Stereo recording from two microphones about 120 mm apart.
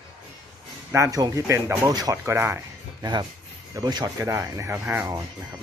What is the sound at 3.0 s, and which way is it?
Speech, 40° right (ahead or behind).